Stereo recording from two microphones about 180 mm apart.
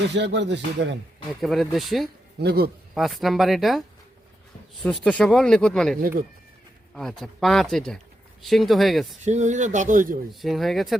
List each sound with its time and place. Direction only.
0.1 s rapping: 75° right (ahead or behind)
1.4 s speech: centre (ahead or behind)
2.4 s a man's voice: 65° right (ahead or behind)
2.9 s speech: centre (ahead or behind)
5.0 s speech: 5° left (ahead or behind)
6.0 s speech: 55° right (ahead or behind)
6.9 s speech: centre (ahead or behind)
9.2 s speech: 40° right (ahead or behind)
10.4 s speech: centre (ahead or behind)